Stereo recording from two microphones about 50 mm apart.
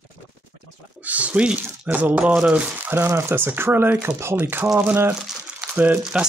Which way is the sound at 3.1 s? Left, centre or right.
Right.